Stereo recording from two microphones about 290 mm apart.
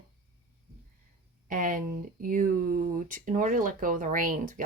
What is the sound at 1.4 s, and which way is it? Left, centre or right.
Speech, right.